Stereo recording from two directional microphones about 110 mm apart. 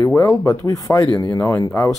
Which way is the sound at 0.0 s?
30° left (ahead or behind).